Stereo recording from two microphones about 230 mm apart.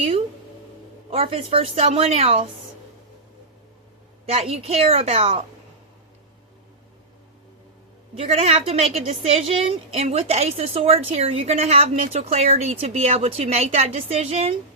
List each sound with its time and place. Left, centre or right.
1.1 s a woman's voice: right
4.3 s a woman's voice: right
8.2 s a woman's voice: right